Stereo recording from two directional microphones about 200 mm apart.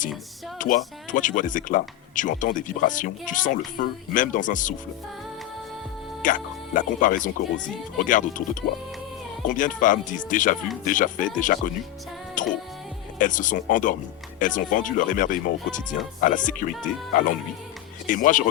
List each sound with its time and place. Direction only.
0.6 s speech: 40° left (ahead or behind)
6.2 s speech: 40° left (ahead or behind)
9.4 s speech: 40° left (ahead or behind)
12.4 s music: 40° left (ahead or behind)
13.1 s speech: 40° left (ahead or behind)